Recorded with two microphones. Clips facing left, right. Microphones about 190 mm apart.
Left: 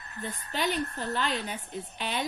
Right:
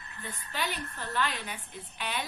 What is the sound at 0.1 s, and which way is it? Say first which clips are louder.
Speech: left 5 dB; 45° left (ahead or behind).